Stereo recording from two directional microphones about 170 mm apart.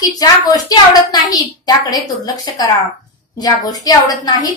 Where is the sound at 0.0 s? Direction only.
20° left (ahead or behind).